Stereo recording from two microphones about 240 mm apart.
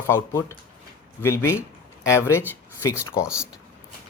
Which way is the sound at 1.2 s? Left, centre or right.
Centre.